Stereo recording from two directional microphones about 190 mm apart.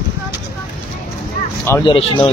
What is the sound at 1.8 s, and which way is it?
Speech, 25° left (ahead or behind).